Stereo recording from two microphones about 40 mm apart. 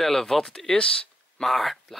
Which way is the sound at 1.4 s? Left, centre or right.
Centre.